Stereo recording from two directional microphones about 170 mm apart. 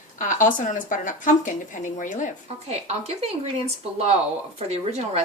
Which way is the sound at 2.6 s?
40° right (ahead or behind).